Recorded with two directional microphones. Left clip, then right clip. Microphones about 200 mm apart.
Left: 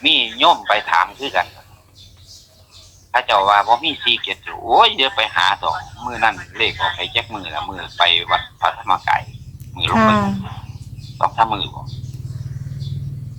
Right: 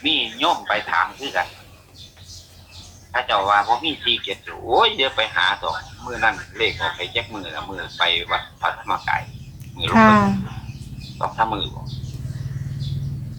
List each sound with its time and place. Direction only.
0.0 s a man's voice: 50° left (ahead or behind)
3.1 s a man's voice: 50° left (ahead or behind)
9.9 s speech: 5° left (ahead or behind)
11.2 s a man's voice: 50° left (ahead or behind)